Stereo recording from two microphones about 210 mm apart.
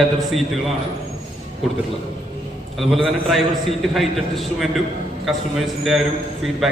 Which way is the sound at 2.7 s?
Centre (ahead or behind).